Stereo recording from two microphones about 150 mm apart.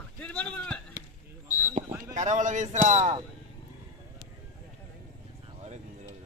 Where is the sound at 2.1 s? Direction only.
55° right (ahead or behind).